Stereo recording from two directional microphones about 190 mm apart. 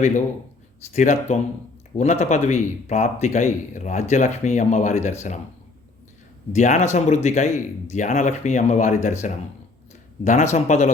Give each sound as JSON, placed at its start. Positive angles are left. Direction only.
{"t": 0.9, "sound": "a man's voice", "side_deg": 40}
{"t": 6.5, "sound": "a man's voice", "side_deg": 40}
{"t": 10.2, "sound": "a man's voice", "side_deg": 40}